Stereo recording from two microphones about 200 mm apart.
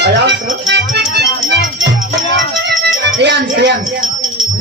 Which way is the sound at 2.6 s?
60° right (ahead or behind).